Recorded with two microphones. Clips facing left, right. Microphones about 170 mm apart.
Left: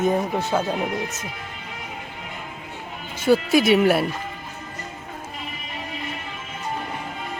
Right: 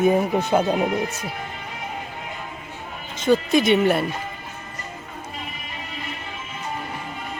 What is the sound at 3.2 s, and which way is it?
Speech, 5° left (ahead or behind).